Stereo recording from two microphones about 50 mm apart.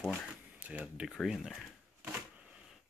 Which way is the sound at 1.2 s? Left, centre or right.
Centre.